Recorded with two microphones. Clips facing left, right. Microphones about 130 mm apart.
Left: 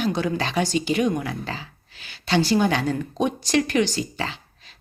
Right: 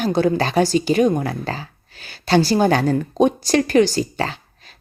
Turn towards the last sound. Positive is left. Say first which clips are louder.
# right 4 dB
turn(degrees=-45)  # may be behind; listen again after turning